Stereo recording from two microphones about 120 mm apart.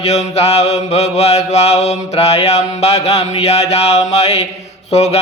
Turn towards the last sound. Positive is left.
turn(degrees=60)  # may be behind; listen again after turning